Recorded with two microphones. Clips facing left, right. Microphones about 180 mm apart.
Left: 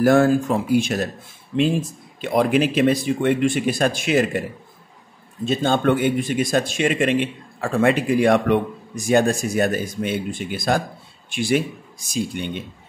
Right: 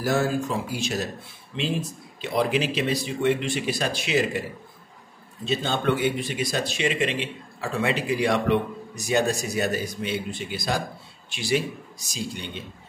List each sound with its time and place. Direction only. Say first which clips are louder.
0.0 s speech: left 8 dB; 55° left (ahead or behind)
5.4 s speech: left 6 dB; 50° left (ahead or behind)